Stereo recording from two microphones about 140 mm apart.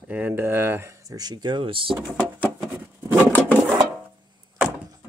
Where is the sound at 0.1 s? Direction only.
15° right (ahead or behind); by 2.0 s 40° right (ahead or behind).